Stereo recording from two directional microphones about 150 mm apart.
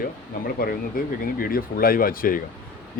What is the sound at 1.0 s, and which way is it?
Speech, 70° left (ahead or behind).